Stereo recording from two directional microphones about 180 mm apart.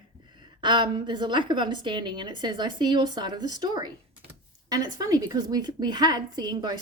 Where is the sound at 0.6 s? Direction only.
25° right (ahead or behind).